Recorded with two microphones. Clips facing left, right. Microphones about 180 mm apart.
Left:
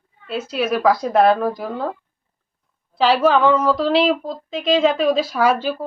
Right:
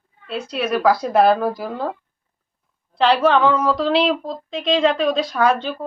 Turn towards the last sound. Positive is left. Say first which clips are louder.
# left 1 dB
turn(degrees=5)  # may be behind; listen again after turning